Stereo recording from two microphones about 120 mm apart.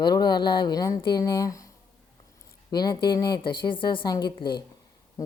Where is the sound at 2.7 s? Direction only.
35° left (ahead or behind).